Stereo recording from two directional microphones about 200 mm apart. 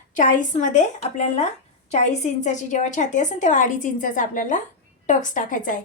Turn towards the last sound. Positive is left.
turn(degrees=40)  # may be behind; listen again after turning